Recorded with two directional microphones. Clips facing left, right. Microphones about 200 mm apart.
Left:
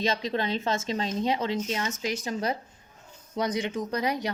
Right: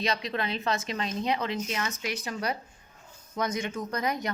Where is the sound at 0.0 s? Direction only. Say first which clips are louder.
Left 3 dB; 25° left (ahead or behind).